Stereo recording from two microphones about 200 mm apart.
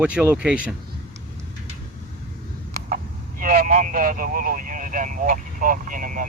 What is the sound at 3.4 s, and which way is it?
Vehicle, 45° right (ahead or behind).